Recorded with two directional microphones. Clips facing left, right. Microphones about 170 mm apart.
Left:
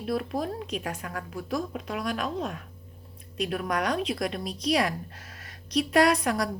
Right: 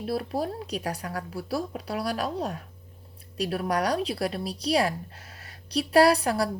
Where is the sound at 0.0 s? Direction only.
35° right (ahead or behind).